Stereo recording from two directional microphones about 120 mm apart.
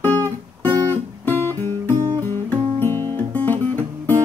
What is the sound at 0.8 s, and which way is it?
Guitar, 20° left (ahead or behind).